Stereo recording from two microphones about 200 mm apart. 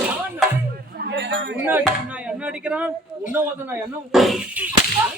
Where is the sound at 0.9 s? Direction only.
55° right (ahead or behind).